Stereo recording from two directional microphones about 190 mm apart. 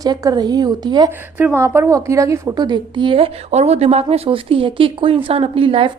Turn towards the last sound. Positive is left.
turn(degrees=-30)  # may be behind; listen again after turning